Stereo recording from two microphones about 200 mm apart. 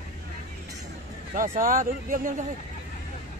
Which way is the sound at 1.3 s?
40° right (ahead or behind).